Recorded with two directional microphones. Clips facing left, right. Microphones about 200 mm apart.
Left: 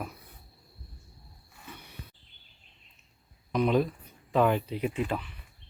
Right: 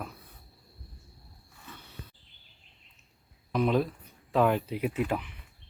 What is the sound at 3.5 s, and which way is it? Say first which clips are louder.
Speech: left 1 dB; centre (ahead or behind).